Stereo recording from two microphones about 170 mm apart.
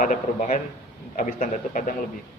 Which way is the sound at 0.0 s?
50° left (ahead or behind).